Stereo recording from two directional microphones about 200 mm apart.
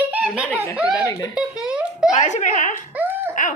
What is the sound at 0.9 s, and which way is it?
Speech, 15° left (ahead or behind).